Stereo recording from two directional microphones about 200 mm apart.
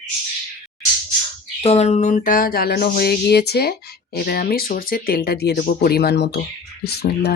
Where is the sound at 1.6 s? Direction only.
30° left (ahead or behind).